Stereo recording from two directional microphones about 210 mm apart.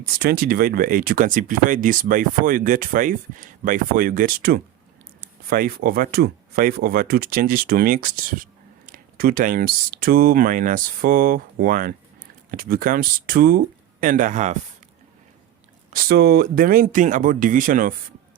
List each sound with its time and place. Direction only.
0.0 s speech: 45° right (ahead or behind)
15.9 s speech: 45° right (ahead or behind)